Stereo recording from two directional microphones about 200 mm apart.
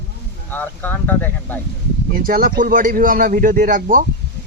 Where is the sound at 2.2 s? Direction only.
45° right (ahead or behind).